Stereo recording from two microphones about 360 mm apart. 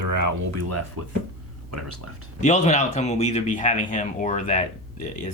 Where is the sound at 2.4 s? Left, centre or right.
Centre.